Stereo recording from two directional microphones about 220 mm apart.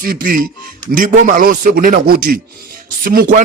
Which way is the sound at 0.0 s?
40° right (ahead or behind).